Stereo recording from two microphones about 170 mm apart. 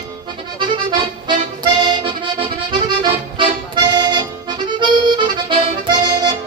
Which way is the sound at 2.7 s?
30° right (ahead or behind).